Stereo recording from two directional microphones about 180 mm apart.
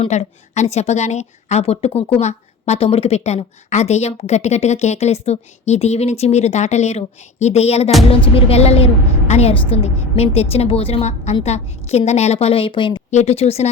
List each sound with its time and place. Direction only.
0.0 s a woman's voice: 35° left (ahead or behind)
13.1 s a woman's voice: 40° left (ahead or behind)